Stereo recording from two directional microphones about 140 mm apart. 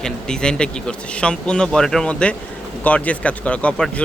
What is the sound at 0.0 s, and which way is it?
A man's voice, 5° left (ahead or behind).